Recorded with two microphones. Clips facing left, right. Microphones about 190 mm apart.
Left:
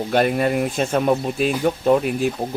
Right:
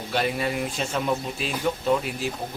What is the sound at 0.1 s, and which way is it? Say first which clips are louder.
Speech: left 7 dB; 50° left (ahead or behind).